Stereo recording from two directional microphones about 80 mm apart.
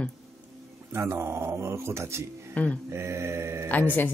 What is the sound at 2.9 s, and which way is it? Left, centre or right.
Speech, right.